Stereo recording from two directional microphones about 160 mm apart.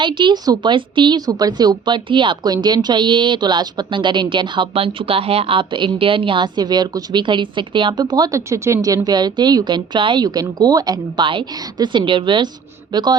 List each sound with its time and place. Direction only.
0.0 s a woman's voice: 30° right (ahead or behind)